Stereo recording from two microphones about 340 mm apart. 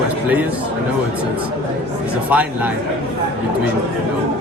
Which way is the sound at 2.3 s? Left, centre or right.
Centre.